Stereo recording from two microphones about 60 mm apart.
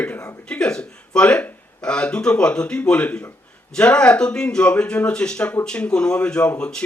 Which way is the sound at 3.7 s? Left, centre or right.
Centre.